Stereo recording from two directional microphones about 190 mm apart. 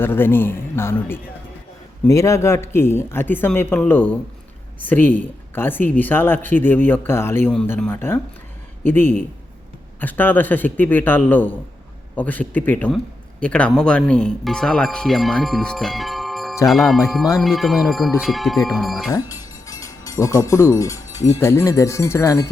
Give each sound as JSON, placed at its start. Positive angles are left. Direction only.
{"t": 0.0, "sound": "speech", "side_deg": 10}
{"t": 19.1, "sound": "a sound", "side_deg": 20}
{"t": 21.2, "sound": "speech", "side_deg": 15}